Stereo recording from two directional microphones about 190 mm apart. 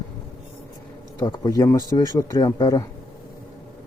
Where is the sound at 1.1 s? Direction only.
25° left (ahead or behind).